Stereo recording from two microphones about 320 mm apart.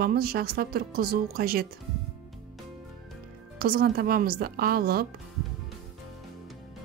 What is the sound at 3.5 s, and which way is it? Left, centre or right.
A woman's voice, right.